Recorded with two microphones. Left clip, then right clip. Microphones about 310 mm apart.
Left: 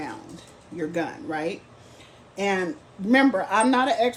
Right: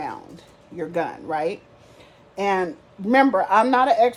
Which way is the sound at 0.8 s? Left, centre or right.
Centre.